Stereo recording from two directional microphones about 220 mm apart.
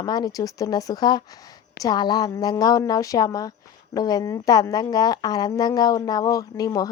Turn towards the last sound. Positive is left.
turn(degrees=15)  # may be behind; listen again after turning